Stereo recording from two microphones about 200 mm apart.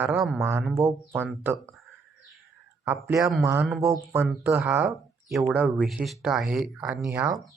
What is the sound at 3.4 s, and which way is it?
Speech, 10° right (ahead or behind).